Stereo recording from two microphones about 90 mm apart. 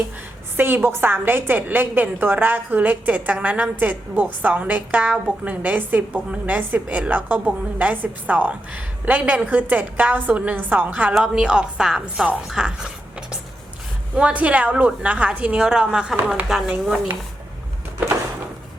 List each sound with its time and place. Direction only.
0.5 s a woman's voice: 25° right (ahead or behind); by 17.0 s 5° right (ahead or behind)